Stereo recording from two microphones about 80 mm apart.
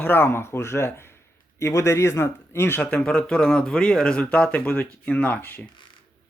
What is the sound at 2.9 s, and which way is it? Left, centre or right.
A man's voice, centre.